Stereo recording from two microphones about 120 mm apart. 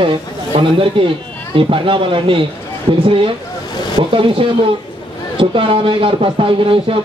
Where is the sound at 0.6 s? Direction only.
45° right (ahead or behind).